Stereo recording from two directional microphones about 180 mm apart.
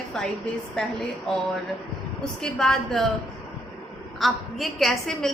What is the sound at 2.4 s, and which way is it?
Speech, centre (ahead or behind).